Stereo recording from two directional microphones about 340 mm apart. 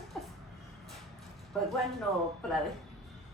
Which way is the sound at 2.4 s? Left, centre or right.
Centre.